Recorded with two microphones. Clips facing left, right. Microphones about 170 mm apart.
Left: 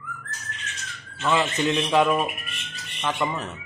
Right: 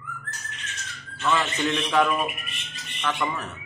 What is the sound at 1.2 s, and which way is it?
Bird, 20° left (ahead or behind).